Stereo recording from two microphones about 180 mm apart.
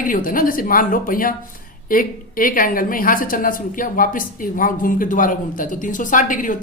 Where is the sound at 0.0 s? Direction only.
50° left (ahead or behind).